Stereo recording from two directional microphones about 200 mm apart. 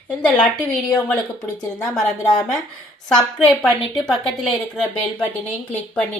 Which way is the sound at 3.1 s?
5° left (ahead or behind).